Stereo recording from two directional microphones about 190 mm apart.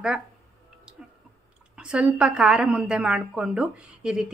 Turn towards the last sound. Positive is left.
turn(degrees=-5)  # may be behind; listen again after turning